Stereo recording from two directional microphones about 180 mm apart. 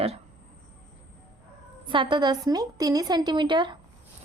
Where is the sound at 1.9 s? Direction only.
25° right (ahead or behind).